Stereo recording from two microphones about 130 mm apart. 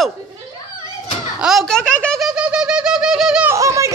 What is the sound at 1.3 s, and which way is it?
Speech, 5° right (ahead or behind).